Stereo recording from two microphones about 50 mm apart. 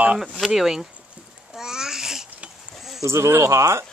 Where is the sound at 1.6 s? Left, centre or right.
Centre.